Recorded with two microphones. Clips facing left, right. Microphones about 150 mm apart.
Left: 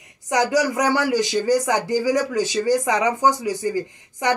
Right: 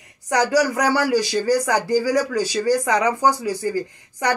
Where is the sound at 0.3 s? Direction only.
20° left (ahead or behind).